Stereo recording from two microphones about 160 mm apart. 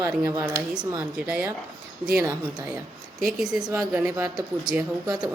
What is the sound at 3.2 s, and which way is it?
A woman's voice, centre (ahead or behind).